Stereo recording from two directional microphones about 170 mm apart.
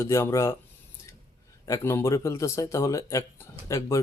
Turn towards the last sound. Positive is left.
turn(degrees=15)  # may be behind; listen again after turning